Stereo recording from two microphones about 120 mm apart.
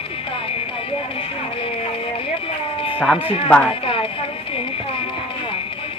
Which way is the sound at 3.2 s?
50° left (ahead or behind).